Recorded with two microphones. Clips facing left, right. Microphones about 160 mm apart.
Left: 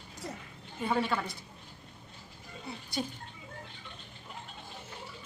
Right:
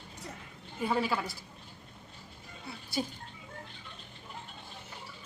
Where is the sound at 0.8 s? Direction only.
Centre (ahead or behind).